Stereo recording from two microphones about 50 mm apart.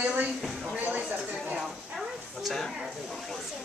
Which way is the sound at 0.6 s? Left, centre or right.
Right.